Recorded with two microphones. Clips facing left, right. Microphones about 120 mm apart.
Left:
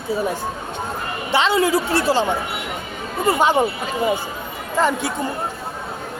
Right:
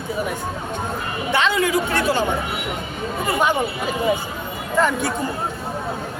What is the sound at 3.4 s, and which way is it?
Speech, 35° left (ahead or behind).